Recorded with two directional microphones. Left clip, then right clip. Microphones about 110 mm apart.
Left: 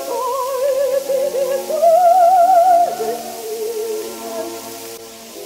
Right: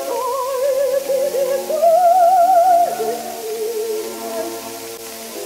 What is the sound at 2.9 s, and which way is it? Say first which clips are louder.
Music: even; 25° right (ahead or behind).